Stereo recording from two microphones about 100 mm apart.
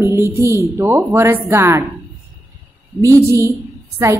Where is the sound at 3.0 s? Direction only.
30° right (ahead or behind).